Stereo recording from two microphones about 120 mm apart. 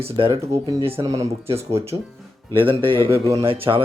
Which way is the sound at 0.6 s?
45° right (ahead or behind).